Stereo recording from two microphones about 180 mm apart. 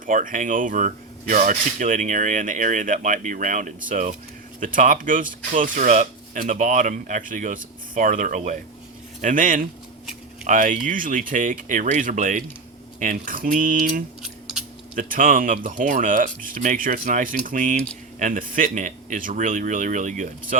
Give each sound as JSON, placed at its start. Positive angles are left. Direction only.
{"t": 0.0, "sound": "speech", "side_deg": -45}